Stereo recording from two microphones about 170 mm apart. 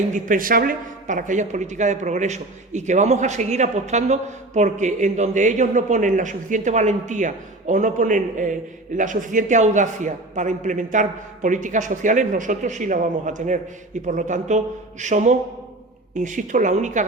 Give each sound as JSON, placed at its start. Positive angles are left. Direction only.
{"t": 0.1, "sound": "speech", "side_deg": -55}